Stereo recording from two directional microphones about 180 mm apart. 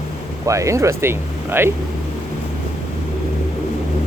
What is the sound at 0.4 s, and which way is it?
Speech, 15° right (ahead or behind).